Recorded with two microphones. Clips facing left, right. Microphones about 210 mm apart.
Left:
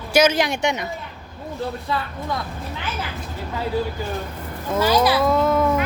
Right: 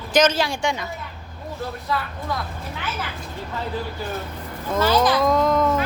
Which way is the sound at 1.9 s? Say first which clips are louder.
Right 1 dB; 25° left (ahead or behind).